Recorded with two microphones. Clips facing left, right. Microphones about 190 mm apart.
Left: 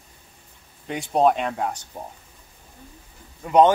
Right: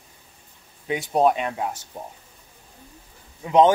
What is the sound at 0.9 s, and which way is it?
Speech, 5° right (ahead or behind).